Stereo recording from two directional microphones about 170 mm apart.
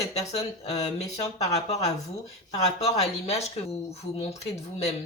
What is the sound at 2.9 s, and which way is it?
Speech, 40° left (ahead or behind).